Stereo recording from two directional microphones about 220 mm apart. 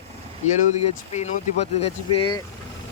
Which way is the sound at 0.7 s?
30° left (ahead or behind).